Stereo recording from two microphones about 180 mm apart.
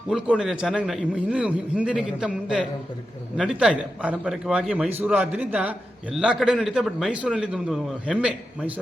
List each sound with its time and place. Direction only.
0.1 s a man's voice: 5° right (ahead or behind)